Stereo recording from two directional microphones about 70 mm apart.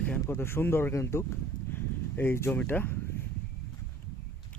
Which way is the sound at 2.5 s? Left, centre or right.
Left.